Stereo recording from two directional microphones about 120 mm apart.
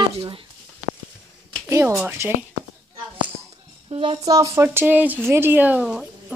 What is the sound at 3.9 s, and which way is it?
Speech, 50° right (ahead or behind).